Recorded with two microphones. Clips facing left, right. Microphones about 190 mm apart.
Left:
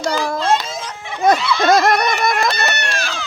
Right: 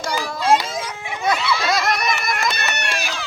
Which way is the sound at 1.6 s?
50° left (ahead or behind).